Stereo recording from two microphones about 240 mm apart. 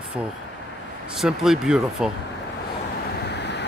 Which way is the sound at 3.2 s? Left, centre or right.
Left.